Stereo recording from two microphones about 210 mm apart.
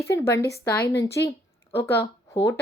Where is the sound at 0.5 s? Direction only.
50° left (ahead or behind).